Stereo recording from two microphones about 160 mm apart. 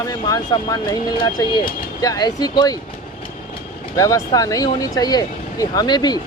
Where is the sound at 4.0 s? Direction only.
20° left (ahead or behind).